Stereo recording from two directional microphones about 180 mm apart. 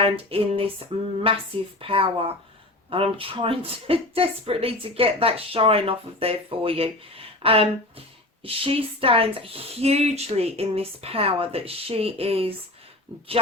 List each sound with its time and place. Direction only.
0.0 s a woman's voice: 30° right (ahead or behind)